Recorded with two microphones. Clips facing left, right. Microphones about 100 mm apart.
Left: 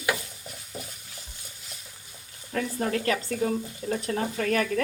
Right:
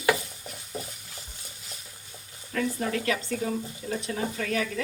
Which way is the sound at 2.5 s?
40° left (ahead or behind).